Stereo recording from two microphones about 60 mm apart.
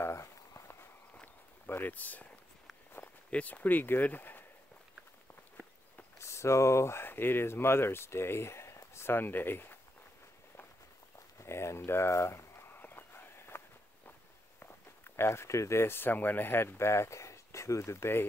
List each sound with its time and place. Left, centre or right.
0.0 s walk: left
1.2 s a sound: left
3.3 s speech: left
6.1 s speech: left
7.1 s speech: left
11.3 s a sound: left
14.6 s speech: left